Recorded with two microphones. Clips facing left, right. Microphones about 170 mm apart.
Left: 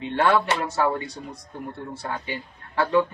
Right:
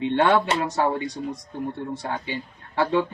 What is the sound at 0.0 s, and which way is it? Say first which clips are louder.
Speech: right 2 dB; 20° right (ahead or behind).